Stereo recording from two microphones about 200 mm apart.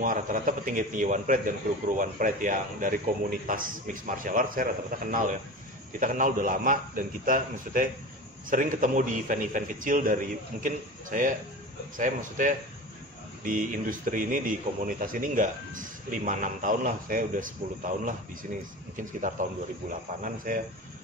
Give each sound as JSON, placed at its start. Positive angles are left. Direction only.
{"t": 0.0, "sound": "a man's voice", "side_deg": -45}